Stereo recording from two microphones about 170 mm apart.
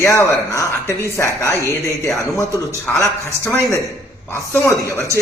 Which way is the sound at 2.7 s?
15° left (ahead or behind).